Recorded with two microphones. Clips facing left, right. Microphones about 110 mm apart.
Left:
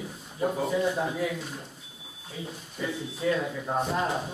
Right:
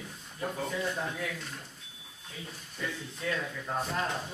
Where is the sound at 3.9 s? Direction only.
10° left (ahead or behind).